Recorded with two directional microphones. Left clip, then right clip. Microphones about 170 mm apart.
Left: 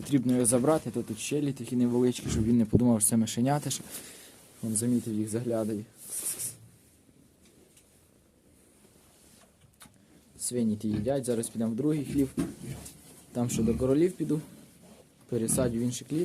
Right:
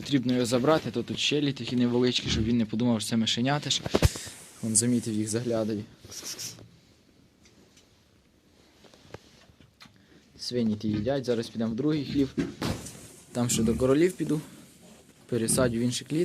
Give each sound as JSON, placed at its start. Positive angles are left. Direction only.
{"t": 0.0, "sound": "speech", "side_deg": 25}
{"t": 0.6, "sound": "speech", "side_deg": 15}
{"t": 2.3, "sound": "speech", "side_deg": 35}
{"t": 4.6, "sound": "speech", "side_deg": 5}
{"t": 10.3, "sound": "speech", "side_deg": 15}
{"t": 13.3, "sound": "speech", "side_deg": 5}